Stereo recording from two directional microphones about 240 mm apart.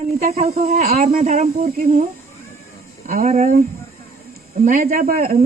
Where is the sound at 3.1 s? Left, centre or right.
Right.